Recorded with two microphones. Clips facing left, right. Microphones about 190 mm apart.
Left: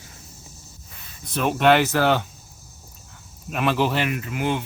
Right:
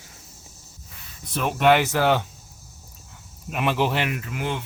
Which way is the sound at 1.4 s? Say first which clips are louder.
Left 1 dB; 5° right (ahead or behind).